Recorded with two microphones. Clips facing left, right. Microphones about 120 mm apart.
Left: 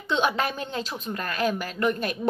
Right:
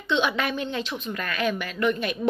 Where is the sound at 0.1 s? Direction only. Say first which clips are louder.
Even; 40° left (ahead or behind).